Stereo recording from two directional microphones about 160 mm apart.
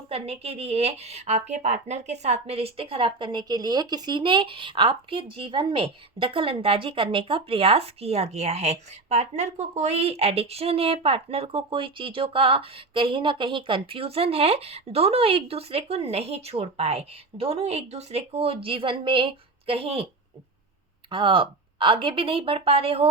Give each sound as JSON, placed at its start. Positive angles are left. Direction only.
{"t": 0.1, "sound": "a woman's voice", "side_deg": -40}
{"t": 21.1, "sound": "a woman's voice", "side_deg": -30}